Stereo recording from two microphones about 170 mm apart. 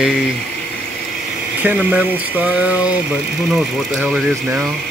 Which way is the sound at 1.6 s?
10° right (ahead or behind).